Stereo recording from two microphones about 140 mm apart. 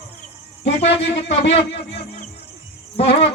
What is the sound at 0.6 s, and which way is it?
Speech, 50° left (ahead or behind).